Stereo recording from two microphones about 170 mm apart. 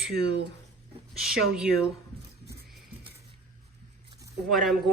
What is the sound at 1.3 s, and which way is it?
Speech, 5° right (ahead or behind).